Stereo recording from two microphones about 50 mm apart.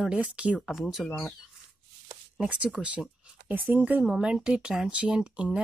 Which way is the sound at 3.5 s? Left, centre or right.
Right.